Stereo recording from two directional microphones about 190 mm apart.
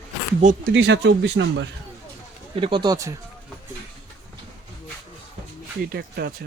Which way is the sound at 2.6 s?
25° right (ahead or behind).